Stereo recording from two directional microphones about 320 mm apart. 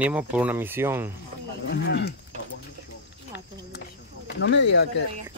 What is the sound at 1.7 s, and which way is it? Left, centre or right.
Speech, left.